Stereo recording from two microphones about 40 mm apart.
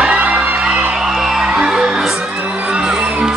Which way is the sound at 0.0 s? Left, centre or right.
Right.